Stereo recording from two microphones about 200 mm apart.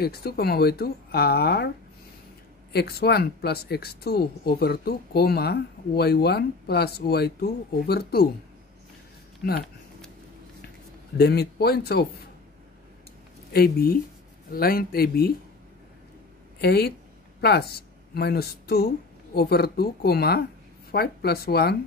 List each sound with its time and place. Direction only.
0.0 s speech: 50° left (ahead or behind)
2.7 s speech: 55° left (ahead or behind)
11.1 s speech: 50° left (ahead or behind)
13.5 s speech: 50° left (ahead or behind)
16.6 s speech: 50° left (ahead or behind)